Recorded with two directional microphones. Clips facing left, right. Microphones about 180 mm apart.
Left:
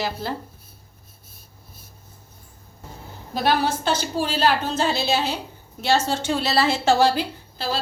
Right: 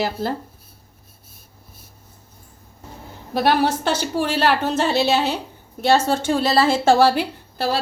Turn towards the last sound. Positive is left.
turn(degrees=-60)  # may be behind; listen again after turning